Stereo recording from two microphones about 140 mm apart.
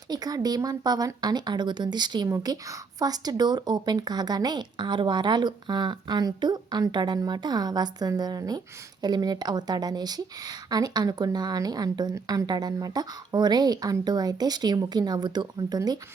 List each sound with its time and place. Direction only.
0.1 s a woman's voice: 25° right (ahead or behind)